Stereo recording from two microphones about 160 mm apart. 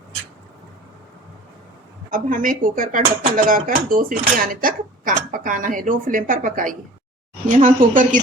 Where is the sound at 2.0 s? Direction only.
55° right (ahead or behind).